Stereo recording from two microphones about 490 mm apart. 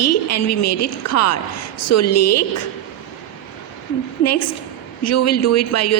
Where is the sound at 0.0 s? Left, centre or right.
Left.